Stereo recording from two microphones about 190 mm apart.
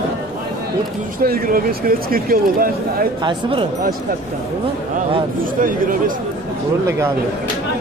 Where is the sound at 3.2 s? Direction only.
25° right (ahead or behind).